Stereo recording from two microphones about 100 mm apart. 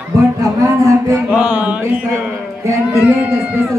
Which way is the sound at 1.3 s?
10° right (ahead or behind).